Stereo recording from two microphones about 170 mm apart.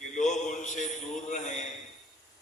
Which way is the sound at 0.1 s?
45° left (ahead or behind).